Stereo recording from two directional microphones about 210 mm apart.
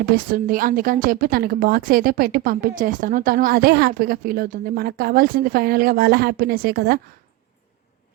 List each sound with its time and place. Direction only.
0.1 s a woman's voice: 40° right (ahead or behind)